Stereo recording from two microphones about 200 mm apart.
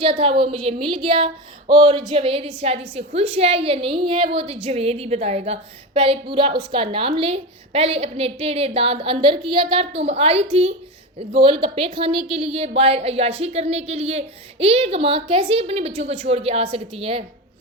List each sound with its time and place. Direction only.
0.0 s a woman's voice: 25° right (ahead or behind)